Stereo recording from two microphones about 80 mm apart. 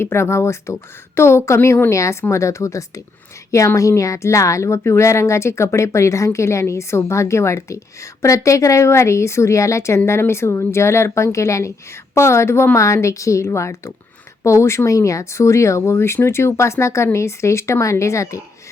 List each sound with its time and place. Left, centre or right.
0.0 s speech: left